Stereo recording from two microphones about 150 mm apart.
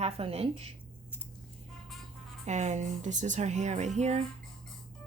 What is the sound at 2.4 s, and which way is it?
Speech, 50° right (ahead or behind).